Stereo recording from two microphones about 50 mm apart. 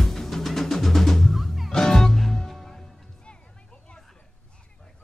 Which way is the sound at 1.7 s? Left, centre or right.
Centre.